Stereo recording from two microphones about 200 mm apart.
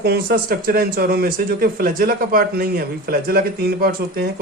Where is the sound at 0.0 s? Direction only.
50° right (ahead or behind).